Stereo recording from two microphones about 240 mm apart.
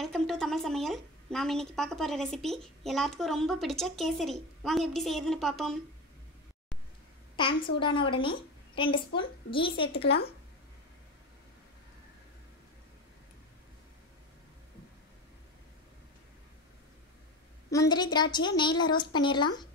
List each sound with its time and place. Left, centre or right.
0.0 s a woman's voice: centre
7.3 s a woman's voice: centre
17.6 s a woman's voice: centre